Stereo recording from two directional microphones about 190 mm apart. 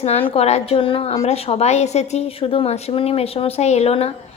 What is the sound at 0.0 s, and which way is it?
A woman's voice, 30° left (ahead or behind).